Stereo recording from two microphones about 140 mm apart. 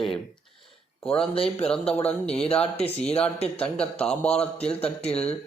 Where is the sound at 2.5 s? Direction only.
45° left (ahead or behind).